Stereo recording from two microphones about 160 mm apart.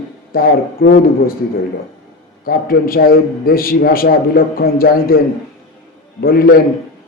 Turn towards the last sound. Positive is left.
turn(degrees=70)  # may be behind; listen again after turning